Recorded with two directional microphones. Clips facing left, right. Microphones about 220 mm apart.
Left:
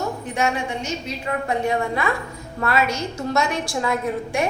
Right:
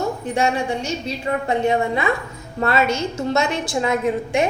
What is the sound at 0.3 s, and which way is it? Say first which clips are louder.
A woman's voice: right 3 dB; 30° right (ahead or behind).